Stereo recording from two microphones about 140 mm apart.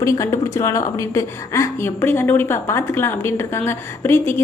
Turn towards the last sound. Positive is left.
turn(degrees=15)  # may be behind; listen again after turning